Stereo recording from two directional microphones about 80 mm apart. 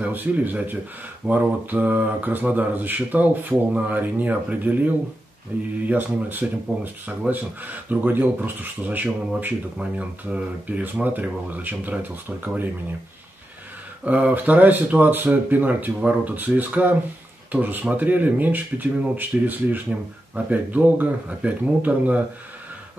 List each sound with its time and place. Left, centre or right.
0.0 s speech: right
14.0 s speech: centre